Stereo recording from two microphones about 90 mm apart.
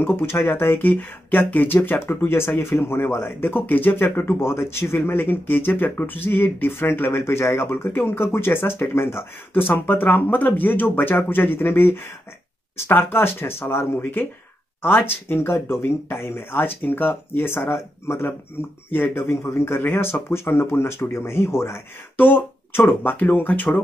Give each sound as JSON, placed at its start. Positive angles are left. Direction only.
{"t": 0.0, "sound": "speech", "side_deg": 25}